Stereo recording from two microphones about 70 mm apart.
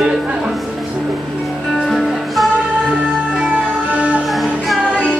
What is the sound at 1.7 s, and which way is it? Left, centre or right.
Music, centre.